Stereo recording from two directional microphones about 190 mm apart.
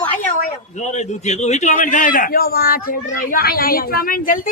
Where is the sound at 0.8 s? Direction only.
40° left (ahead or behind).